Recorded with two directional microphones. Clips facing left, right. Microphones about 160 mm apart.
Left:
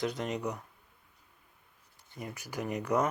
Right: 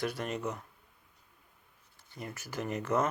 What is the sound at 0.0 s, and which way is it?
Speech, 20° left (ahead or behind).